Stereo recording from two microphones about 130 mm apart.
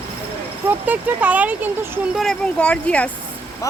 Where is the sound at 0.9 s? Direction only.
10° right (ahead or behind).